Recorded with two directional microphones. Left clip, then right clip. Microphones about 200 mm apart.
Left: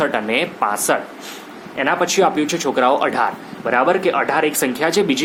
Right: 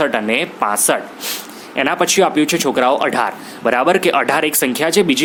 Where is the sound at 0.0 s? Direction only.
30° right (ahead or behind).